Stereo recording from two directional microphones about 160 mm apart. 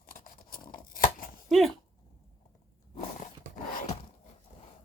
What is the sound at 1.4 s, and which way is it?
Speech, centre (ahead or behind).